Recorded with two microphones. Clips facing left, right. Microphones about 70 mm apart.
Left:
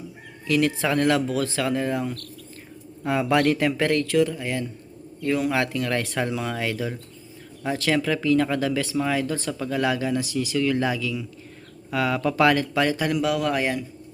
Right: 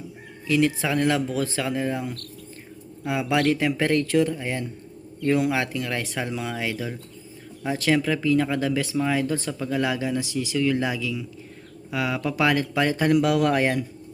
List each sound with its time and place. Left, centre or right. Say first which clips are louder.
0.4 s speech: even; centre
4.0 s speech: even; right
5.5 s speech: left 2 dB; centre
9.5 s speech: left 1 dB; centre
12.5 s speech: even; right
13.1 s speech: right 3 dB; right